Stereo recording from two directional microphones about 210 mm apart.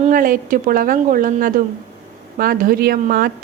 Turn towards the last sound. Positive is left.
turn(degrees=-45)  # may be behind; listen again after turning